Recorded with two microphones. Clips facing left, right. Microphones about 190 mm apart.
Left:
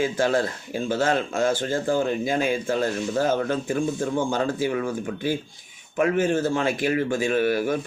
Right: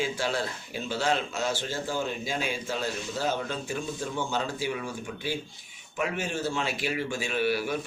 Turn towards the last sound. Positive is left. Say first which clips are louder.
# left 6 dB
turn(degrees=45)  # may be behind; listen again after turning